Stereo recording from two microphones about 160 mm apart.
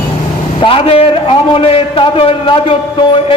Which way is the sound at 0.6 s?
35° left (ahead or behind).